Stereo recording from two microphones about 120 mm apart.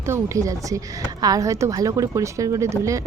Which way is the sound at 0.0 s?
25° right (ahead or behind).